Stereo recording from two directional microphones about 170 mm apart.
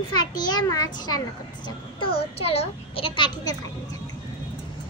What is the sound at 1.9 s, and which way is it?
A child's voice, 30° left (ahead or behind).